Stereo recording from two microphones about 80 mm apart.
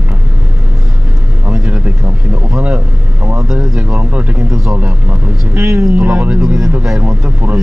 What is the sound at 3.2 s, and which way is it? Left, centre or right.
Speech, right.